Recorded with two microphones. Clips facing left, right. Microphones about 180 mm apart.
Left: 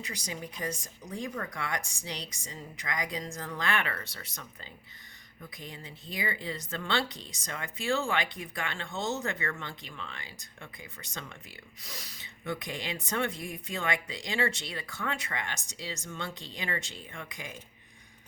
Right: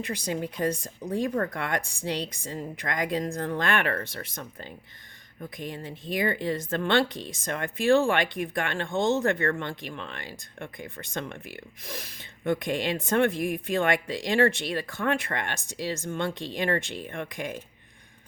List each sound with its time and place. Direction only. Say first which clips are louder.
0.0 s speech: right 9 dB; 55° right (ahead or behind)